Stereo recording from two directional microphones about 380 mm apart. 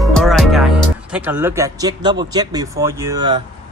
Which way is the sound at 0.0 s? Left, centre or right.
Centre.